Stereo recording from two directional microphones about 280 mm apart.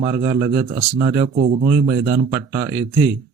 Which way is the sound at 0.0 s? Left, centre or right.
Centre.